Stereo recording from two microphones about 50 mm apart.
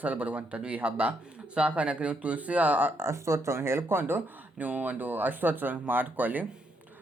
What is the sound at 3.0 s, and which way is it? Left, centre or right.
Speech, right.